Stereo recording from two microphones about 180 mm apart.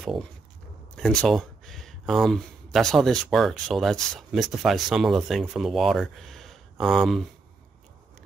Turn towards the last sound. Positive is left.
turn(degrees=0)  # may be behind; listen again after turning